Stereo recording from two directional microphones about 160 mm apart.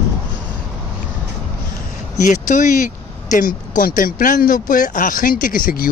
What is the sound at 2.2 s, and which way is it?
Speech, 50° left (ahead or behind).